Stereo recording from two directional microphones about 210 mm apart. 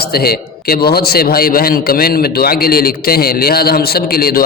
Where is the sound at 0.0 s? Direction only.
45° left (ahead or behind).